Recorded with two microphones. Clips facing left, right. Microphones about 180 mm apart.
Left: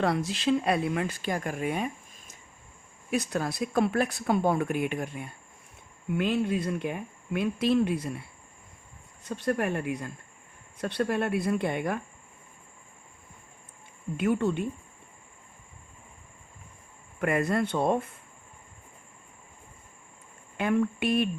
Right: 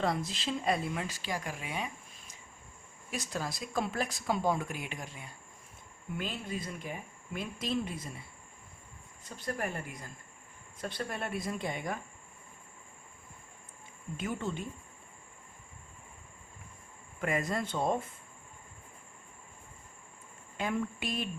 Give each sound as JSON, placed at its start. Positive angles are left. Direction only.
{"t": 0.0, "sound": "speech", "side_deg": 70}
{"t": 6.1, "sound": "speech", "side_deg": 70}
{"t": 9.2, "sound": "speech", "side_deg": 70}
{"t": 14.2, "sound": "speech", "side_deg": 65}
{"t": 17.2, "sound": "speech", "side_deg": 65}
{"t": 20.6, "sound": "speech", "side_deg": 60}